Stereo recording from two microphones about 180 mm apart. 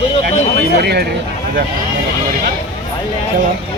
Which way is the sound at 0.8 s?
60° right (ahead or behind).